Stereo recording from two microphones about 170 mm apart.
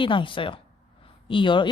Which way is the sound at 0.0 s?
30° left (ahead or behind).